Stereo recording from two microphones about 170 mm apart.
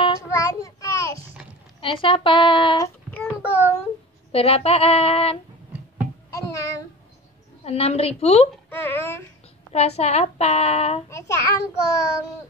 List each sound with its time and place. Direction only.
0.4 s child singing: 20° left (ahead or behind)
2.0 s a sound: 30° left (ahead or behind)
2.8 s child singing: 10° left (ahead or behind)
4.3 s speech: 35° left (ahead or behind)
6.3 s child singing: 20° left (ahead or behind)
7.6 s speech: 35° left (ahead or behind)
8.6 s speech: 15° left (ahead or behind)
9.7 s speech: 40° left (ahead or behind)
11.1 s a child's voice: 15° left (ahead or behind)